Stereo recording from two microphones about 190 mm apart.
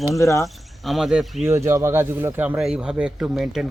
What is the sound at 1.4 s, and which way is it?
Speech, 15° right (ahead or behind).